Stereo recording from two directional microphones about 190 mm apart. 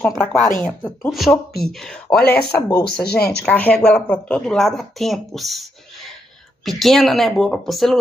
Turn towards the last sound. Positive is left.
turn(degrees=0)  # may be behind; listen again after turning